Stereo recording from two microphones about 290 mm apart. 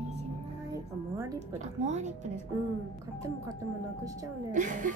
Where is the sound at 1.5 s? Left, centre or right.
Right.